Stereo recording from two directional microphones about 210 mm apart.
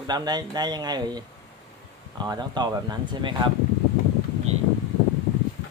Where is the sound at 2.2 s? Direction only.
20° right (ahead or behind).